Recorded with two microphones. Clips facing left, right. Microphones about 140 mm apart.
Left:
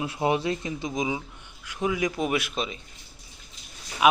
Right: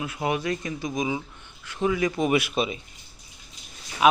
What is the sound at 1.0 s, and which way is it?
A man's voice, 10° left (ahead or behind).